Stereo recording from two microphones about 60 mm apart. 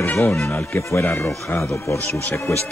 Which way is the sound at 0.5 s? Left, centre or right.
Left.